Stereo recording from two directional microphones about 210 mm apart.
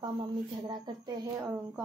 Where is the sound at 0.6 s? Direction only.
20° right (ahead or behind).